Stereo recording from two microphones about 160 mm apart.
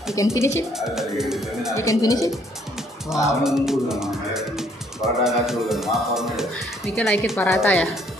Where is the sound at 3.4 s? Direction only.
5° right (ahead or behind).